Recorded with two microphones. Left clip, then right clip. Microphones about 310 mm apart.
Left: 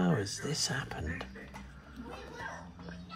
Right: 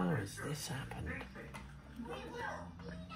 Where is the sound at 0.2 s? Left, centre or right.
Left.